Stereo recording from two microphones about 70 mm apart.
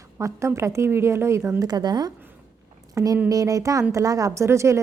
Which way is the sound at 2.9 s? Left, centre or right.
Right.